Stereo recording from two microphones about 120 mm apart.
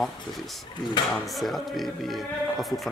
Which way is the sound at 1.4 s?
Centre (ahead or behind).